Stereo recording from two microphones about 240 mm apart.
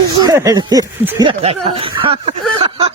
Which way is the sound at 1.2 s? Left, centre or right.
Right.